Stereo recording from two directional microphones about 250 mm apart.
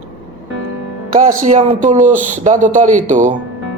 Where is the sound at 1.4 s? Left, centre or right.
Right.